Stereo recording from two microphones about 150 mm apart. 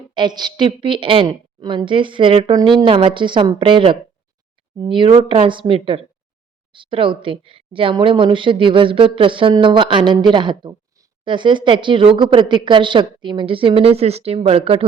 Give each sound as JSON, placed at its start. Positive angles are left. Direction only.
{"t": 0.1, "sound": "a woman's voice", "side_deg": -30}